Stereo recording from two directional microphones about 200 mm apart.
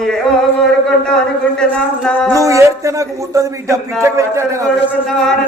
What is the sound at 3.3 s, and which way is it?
Speech, 15° right (ahead or behind).